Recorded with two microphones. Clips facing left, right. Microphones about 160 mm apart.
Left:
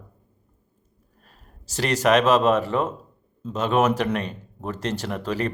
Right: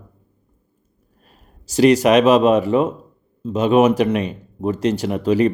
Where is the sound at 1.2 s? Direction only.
15° right (ahead or behind).